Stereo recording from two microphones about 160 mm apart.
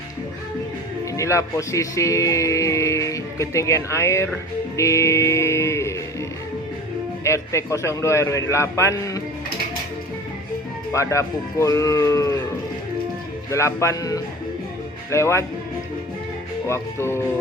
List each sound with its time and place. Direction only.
1.1 s speech: 20° left (ahead or behind)
7.3 s a man's voice: 20° left (ahead or behind)
10.9 s speech: 20° left (ahead or behind)
13.5 s a man's voice: 20° left (ahead or behind)
16.6 s a man's voice: 15° left (ahead or behind)